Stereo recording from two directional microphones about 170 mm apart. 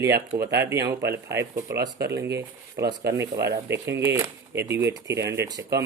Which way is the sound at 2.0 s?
75° right (ahead or behind).